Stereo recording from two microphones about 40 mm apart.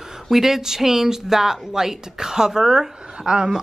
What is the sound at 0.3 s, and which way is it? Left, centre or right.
Speech, centre.